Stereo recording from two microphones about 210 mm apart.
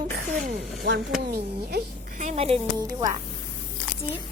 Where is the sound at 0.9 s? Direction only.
55° right (ahead or behind).